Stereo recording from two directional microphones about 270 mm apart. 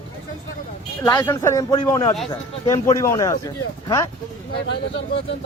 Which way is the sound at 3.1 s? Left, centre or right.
Centre.